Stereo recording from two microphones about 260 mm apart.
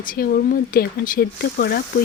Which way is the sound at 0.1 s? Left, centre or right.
Left.